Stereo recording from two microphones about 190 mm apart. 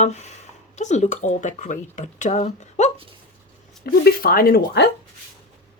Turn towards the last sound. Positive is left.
turn(degrees=60)  # may be behind; listen again after turning